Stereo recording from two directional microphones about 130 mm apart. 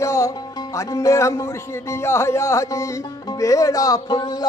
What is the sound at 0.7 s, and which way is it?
A man's voice, 25° left (ahead or behind).